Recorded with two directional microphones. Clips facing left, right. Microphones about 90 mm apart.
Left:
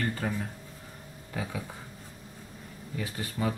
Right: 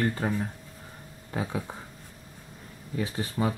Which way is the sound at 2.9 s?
20° right (ahead or behind).